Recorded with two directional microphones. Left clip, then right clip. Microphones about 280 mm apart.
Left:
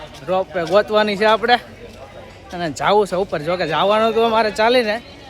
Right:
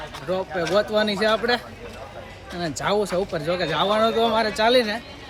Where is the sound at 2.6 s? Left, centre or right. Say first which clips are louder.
Left 7 dB; centre.